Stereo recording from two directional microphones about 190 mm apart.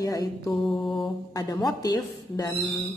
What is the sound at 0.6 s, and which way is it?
Mantra, 5° left (ahead or behind).